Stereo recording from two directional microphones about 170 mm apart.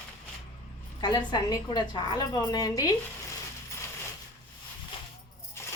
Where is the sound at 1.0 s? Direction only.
25° left (ahead or behind).